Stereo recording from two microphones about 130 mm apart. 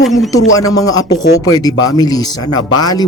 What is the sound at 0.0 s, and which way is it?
Speech, centre (ahead or behind).